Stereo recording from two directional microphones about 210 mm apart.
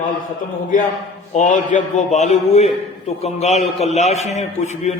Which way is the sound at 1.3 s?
35° left (ahead or behind).